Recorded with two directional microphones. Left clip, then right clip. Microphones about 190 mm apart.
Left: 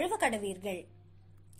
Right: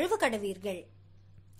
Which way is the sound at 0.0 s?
20° right (ahead or behind).